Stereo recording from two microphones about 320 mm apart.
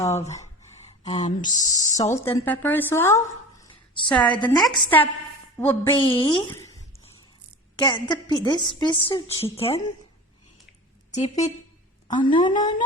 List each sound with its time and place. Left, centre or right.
1.0 s a woman's voice: centre
7.8 s speech: centre
11.1 s a woman's voice: left